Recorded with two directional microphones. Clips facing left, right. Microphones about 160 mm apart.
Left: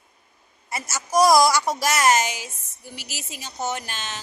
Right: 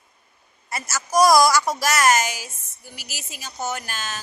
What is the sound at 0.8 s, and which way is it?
A woman's voice, 25° left (ahead or behind).